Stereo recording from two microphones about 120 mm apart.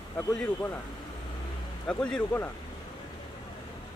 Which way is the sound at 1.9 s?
10° left (ahead or behind).